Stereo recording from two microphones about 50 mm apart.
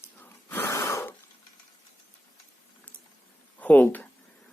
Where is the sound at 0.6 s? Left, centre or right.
Left.